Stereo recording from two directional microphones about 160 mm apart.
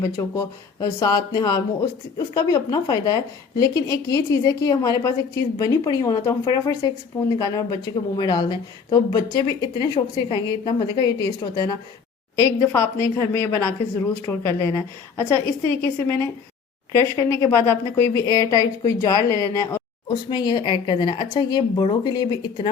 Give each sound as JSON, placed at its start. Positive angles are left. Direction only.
{"t": 0.0, "sound": "a woman's voice", "side_deg": 20}